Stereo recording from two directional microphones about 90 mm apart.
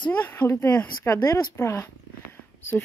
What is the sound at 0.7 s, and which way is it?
Speech, 20° left (ahead or behind).